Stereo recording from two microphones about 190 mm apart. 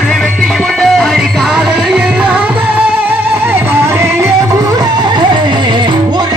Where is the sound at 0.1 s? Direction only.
Centre (ahead or behind).